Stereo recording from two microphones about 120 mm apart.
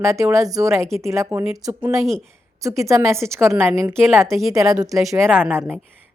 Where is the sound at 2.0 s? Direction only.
5° left (ahead or behind).